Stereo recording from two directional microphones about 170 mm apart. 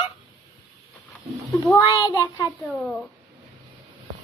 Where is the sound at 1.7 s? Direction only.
20° left (ahead or behind).